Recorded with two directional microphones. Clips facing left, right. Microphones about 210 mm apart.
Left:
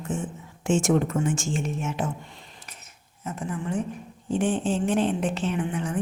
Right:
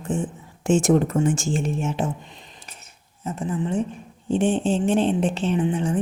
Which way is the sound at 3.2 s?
25° right (ahead or behind).